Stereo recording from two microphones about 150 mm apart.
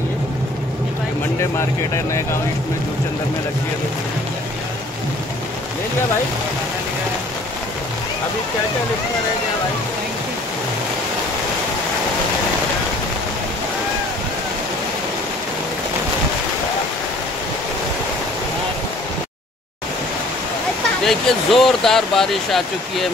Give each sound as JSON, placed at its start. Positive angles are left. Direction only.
{"t": 21.0, "sound": "speech", "side_deg": 0}